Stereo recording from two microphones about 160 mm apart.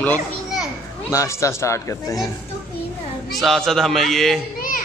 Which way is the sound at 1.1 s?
20° left (ahead or behind).